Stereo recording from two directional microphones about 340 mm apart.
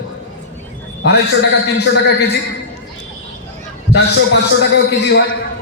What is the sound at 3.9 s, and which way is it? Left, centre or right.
A man's voice, left.